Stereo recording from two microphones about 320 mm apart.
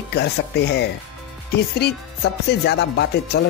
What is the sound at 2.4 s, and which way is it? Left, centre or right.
Speech, left.